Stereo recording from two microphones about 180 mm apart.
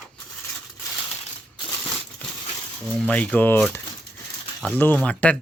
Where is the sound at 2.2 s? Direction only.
10° left (ahead or behind).